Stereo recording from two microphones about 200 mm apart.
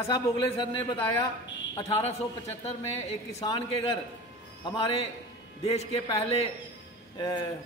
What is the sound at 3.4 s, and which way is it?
Speech, 25° left (ahead or behind).